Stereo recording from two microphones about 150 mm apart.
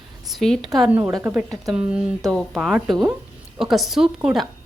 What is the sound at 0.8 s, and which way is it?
Speech, 10° right (ahead or behind).